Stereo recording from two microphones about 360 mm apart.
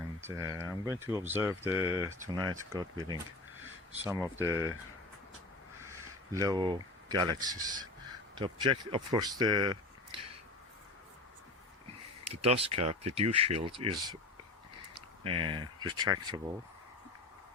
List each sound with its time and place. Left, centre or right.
0.3 s speech: centre
4.2 s speech: centre
6.3 s speech: centre
12.2 s speech: centre
15.2 s speech: centre